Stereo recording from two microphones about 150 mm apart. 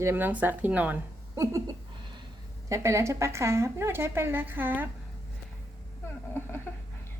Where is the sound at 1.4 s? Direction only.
20° right (ahead or behind).